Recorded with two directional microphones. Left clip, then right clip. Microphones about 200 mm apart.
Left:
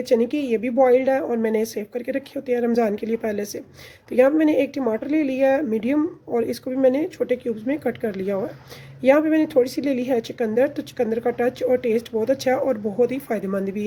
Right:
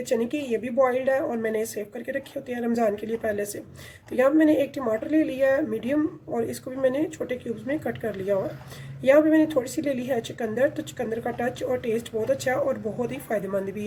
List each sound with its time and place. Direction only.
0.1 s a woman's voice: 40° left (ahead or behind)